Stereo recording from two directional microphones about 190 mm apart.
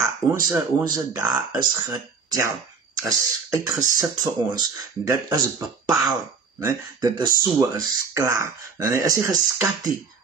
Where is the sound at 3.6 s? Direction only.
20° right (ahead or behind).